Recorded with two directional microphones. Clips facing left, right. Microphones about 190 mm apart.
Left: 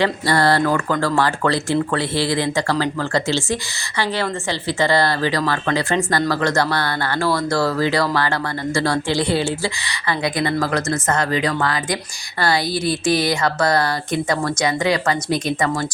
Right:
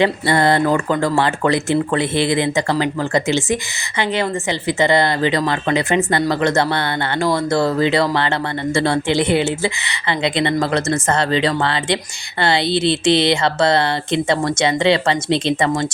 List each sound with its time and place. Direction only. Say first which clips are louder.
0.0 s speech: right 2 dB; 20° right (ahead or behind)